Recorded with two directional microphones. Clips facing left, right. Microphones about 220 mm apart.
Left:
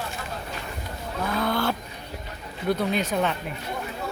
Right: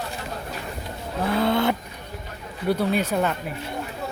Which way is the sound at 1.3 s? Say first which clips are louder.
Right 4 dB; 25° right (ahead or behind).